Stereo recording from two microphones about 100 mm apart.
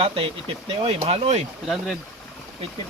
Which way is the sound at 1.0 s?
85° right.